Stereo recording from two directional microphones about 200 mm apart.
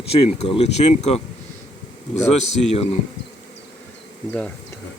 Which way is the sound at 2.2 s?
35° left (ahead or behind).